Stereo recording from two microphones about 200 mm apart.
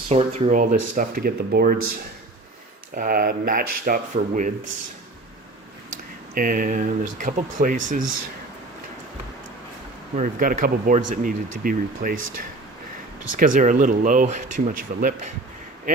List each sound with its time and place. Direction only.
0.1 s speech: 35° right (ahead or behind); by 1.8 s 50° right (ahead or behind)
2.9 s speech: 45° right (ahead or behind)
6.3 s speech: 45° right (ahead or behind)
10.2 s speech: 40° right (ahead or behind)
13.3 s speech: 40° right (ahead or behind)